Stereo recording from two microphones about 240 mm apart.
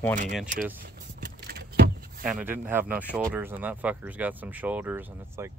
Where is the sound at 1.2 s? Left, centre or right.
Right.